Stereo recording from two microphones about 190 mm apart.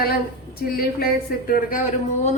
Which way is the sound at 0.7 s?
55° left (ahead or behind).